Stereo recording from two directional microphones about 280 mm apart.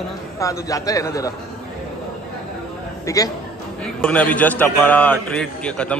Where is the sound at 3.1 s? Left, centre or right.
Centre.